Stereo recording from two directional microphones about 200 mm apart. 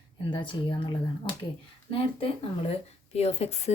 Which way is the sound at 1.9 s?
25° left (ahead or behind).